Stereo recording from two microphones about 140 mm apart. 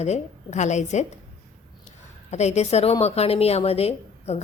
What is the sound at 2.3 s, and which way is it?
A woman's voice, 55° left (ahead or behind).